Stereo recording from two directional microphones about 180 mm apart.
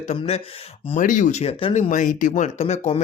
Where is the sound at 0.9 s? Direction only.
45° left (ahead or behind).